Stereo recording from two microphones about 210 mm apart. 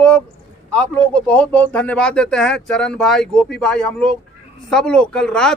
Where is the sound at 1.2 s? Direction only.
5° left (ahead or behind).